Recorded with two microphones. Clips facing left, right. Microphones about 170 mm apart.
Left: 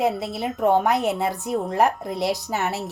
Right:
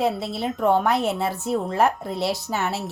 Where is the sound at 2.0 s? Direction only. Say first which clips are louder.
Even; centre (ahead or behind).